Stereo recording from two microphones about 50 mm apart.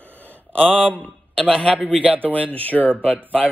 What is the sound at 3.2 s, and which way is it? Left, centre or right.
Speech, right.